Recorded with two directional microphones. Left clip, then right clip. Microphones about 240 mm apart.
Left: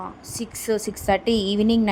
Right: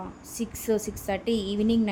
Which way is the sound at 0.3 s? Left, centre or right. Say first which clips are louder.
Left 2 dB; centre.